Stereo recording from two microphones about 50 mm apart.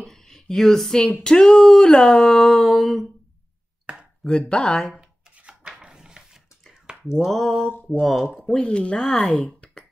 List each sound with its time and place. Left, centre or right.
0.0 s a sound: centre
4.2 s speech: centre
4.9 s music: centre
6.9 s a sound: centre
7.2 s mantra: centre
7.7 s speech: left
8.5 s speech: centre